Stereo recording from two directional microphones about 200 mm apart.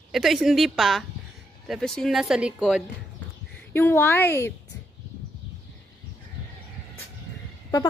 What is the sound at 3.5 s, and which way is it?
A woman's voice, 10° left (ahead or behind).